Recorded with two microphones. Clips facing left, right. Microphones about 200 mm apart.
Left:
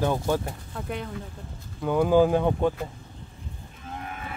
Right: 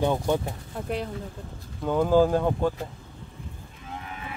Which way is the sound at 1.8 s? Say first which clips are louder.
Left 1 dB; 5° left (ahead or behind).